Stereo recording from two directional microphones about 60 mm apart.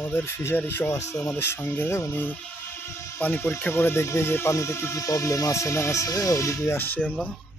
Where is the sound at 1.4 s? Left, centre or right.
Left.